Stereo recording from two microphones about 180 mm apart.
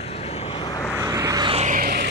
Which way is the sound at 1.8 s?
60° right (ahead or behind).